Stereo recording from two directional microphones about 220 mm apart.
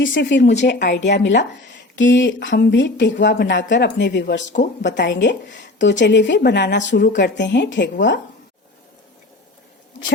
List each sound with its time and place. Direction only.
0.0 s a woman's voice: 55° left (ahead or behind)